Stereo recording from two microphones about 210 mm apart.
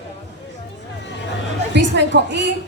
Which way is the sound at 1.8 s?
55° right (ahead or behind).